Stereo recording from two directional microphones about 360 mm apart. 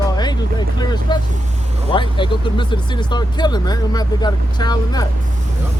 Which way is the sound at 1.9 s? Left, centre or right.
Centre.